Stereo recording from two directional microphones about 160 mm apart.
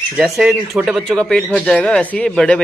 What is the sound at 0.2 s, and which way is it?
Speech, centre (ahead or behind).